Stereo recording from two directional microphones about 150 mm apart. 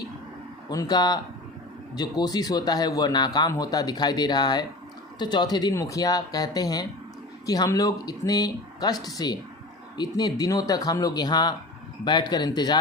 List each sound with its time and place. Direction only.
0.7 s speech: 25° left (ahead or behind)